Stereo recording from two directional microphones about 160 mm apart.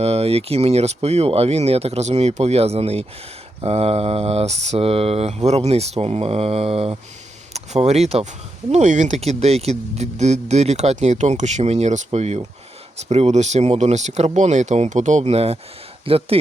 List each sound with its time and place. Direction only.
0.0 s speech: 40° right (ahead or behind)